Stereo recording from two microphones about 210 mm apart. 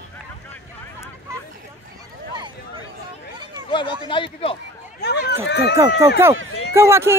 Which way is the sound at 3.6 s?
25° left (ahead or behind).